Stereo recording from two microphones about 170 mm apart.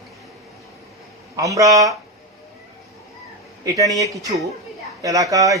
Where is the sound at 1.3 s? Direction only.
20° right (ahead or behind).